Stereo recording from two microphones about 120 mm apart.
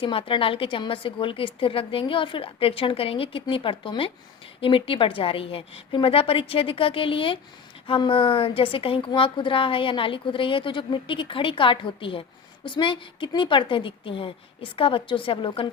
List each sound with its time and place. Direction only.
0.0 s a woman's voice: 45° left (ahead or behind)